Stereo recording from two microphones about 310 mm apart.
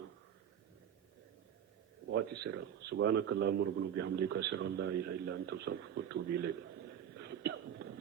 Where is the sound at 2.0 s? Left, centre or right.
Right.